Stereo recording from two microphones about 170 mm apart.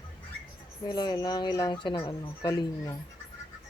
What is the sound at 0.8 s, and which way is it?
Speech, 25° left (ahead or behind).